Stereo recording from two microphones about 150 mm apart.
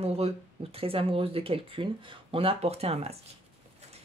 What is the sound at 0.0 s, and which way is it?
Speech, 45° right (ahead or behind).